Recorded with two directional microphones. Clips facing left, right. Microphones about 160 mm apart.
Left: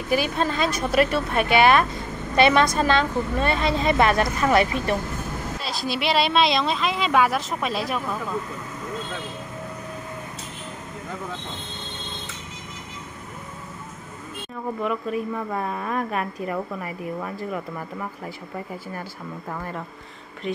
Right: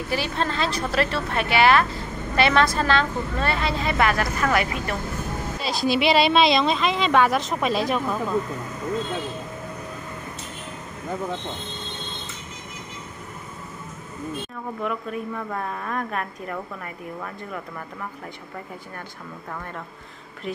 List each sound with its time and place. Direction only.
0.1 s a woman's voice: 15° left (ahead or behind)
5.6 s speech: centre (ahead or behind)
14.8 s a woman's voice: centre (ahead or behind)
20.5 s speech: centre (ahead or behind)